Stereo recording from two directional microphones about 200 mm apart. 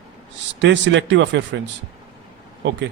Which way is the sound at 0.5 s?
60° right (ahead or behind).